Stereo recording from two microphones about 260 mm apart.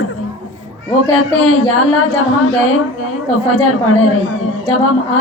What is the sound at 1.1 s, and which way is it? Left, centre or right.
A woman's voice, left.